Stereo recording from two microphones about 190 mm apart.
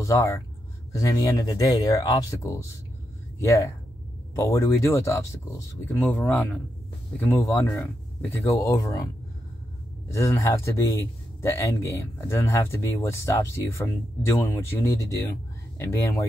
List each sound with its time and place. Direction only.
0.0 s speech: 15° left (ahead or behind)